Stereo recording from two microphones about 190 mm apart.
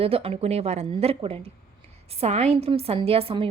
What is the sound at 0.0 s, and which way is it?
A woman's voice, 30° right (ahead or behind).